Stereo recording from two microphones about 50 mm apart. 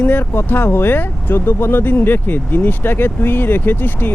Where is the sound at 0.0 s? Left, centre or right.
Left.